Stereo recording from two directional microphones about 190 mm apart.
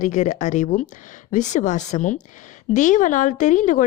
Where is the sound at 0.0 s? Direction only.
40° left (ahead or behind).